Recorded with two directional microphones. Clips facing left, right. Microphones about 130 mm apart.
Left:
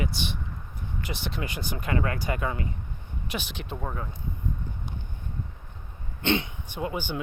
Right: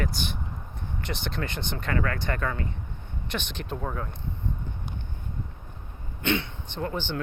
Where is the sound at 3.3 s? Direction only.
5° left (ahead or behind).